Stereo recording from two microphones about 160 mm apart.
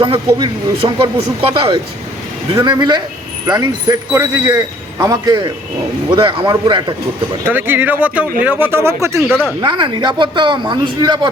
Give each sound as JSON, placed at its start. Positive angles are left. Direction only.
{"t": 0.0, "sound": "a man's voice", "side_deg": -30}
{"t": 7.4, "sound": "speech", "side_deg": -10}
{"t": 9.6, "sound": "a man's voice", "side_deg": -30}